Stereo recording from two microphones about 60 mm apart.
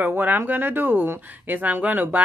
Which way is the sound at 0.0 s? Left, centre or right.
Right.